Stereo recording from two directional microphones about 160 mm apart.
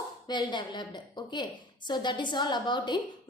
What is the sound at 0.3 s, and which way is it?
A woman's voice, 30° left (ahead or behind).